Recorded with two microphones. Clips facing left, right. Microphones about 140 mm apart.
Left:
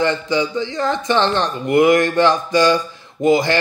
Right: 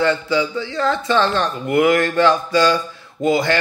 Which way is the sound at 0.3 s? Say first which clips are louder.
Left 1 dB; 15° left (ahead or behind).